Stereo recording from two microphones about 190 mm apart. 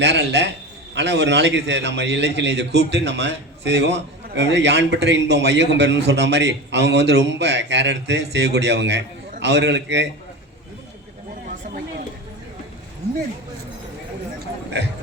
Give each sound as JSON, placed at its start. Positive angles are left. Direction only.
{"t": 0.0, "sound": "a man's voice", "side_deg": -65}